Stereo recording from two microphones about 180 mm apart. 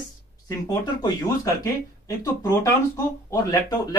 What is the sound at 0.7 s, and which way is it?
Speech, 20° left (ahead or behind).